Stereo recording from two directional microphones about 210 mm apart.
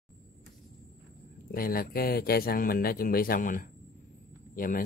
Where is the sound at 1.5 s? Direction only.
45° left (ahead or behind).